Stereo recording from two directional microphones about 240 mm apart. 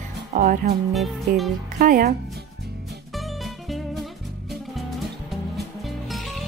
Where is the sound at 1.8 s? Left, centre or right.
Right.